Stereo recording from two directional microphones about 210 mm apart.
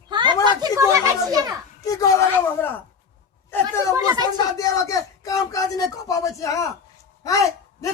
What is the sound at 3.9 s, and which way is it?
Speech, 15° right (ahead or behind).